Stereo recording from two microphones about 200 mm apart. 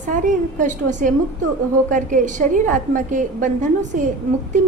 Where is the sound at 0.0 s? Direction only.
40° right (ahead or behind).